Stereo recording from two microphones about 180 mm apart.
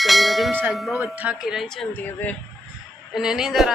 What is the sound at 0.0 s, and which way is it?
Bell, centre (ahead or behind).